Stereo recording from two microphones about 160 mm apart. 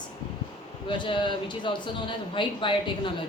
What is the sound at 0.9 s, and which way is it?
Speech, 30° left (ahead or behind).